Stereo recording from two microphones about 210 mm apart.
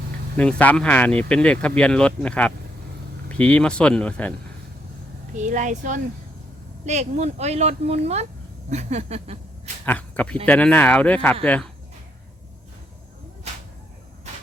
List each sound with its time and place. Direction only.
0.3 s speech: 5° left (ahead or behind)
5.4 s speech: 35° right (ahead or behind)
9.8 s speech: 10° left (ahead or behind)